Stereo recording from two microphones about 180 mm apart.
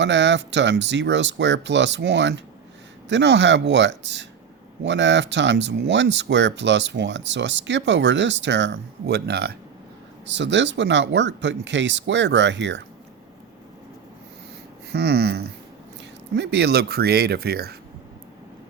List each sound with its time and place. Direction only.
0.0 s speech: 80° right; by 9.6 s 60° right (ahead or behind)
10.2 s speech: 80° right
14.9 s speech: 65° right (ahead or behind)